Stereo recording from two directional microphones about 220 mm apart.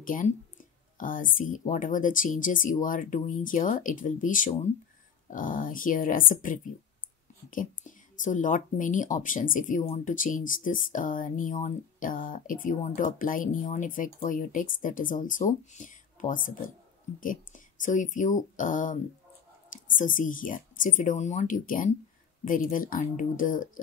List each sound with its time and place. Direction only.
0.0 s speech: 40° left (ahead or behind)